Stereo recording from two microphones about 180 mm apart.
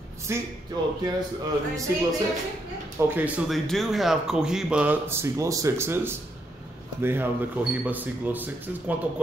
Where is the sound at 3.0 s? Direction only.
10° right (ahead or behind).